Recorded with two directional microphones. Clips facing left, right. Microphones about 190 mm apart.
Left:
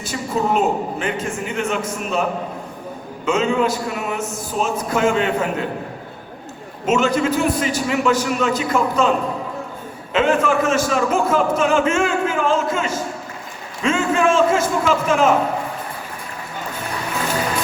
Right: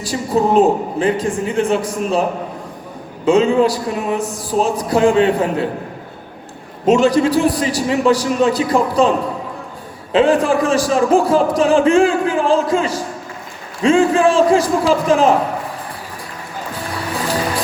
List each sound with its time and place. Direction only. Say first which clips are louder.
0.0 s a man's voice: right 5 dB; 35° right (ahead or behind)
3.2 s a man's voice: right 6 dB; 35° right (ahead or behind)
6.8 s a man's voice: right 5 dB; 35° right (ahead or behind)